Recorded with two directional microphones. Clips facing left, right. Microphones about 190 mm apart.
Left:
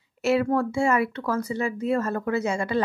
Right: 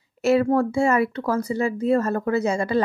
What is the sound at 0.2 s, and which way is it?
Speech, 40° right (ahead or behind).